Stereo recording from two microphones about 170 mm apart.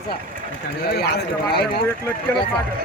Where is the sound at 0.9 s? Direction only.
70° left (ahead or behind).